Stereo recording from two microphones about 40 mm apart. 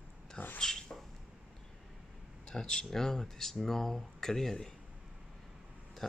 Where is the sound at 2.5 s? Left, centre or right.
Centre.